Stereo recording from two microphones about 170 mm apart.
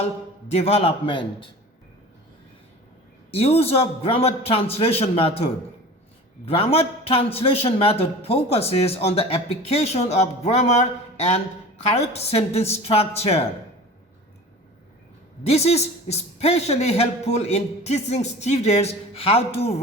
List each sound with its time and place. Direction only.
0.5 s a man's voice: 35° left (ahead or behind)
3.3 s a man's voice: 35° left (ahead or behind)
15.4 s a man's voice: 40° left (ahead or behind)